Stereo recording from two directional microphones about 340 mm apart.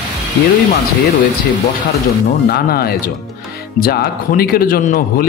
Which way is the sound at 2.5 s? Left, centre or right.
Left.